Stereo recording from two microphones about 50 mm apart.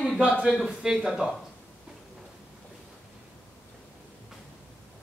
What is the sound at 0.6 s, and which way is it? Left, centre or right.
Speech, centre.